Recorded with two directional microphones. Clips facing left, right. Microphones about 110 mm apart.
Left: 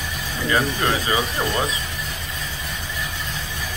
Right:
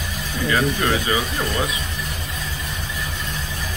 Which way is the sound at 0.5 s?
25° left (ahead or behind).